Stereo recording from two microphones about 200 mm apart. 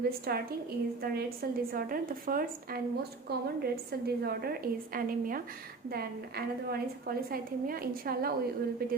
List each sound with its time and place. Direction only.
0.0 s a woman's voice: 50° right (ahead or behind)